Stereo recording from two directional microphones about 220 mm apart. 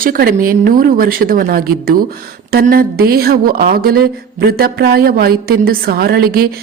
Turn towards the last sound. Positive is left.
turn(degrees=-45)  # may be behind; listen again after turning